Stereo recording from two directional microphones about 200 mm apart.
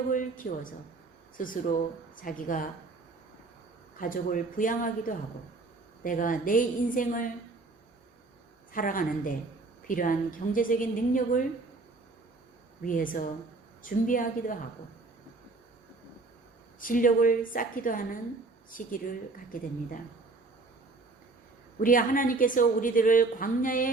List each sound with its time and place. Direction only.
0.1 s a woman's voice: 40° left (ahead or behind)
3.9 s a woman's voice: 45° left (ahead or behind)
8.7 s a woman's voice: 45° left (ahead or behind)
12.8 s a woman's voice: 45° left (ahead or behind)
16.8 s a woman's voice: 45° left (ahead or behind)
21.8 s a woman's voice: 45° left (ahead or behind)